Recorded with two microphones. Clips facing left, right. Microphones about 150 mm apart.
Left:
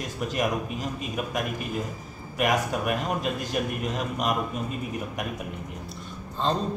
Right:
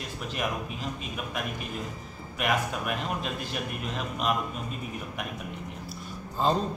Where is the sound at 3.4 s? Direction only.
45° left (ahead or behind).